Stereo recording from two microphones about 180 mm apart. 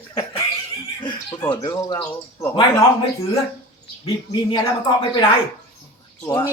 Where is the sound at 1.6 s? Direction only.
20° left (ahead or behind).